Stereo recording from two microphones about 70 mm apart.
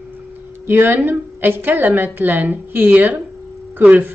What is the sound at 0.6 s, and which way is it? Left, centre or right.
A woman's voice, right.